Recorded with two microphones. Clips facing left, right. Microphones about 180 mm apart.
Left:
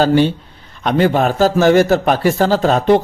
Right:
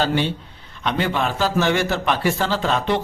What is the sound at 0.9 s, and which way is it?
A man's voice, 45° left (ahead or behind).